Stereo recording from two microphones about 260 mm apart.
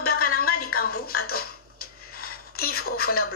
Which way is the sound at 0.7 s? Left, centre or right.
Left.